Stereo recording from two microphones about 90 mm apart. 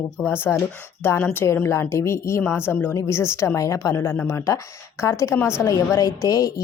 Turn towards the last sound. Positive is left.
turn(degrees=40)  # may be behind; listen again after turning